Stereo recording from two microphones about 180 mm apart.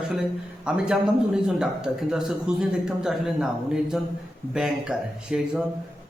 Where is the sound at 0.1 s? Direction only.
5° right (ahead or behind).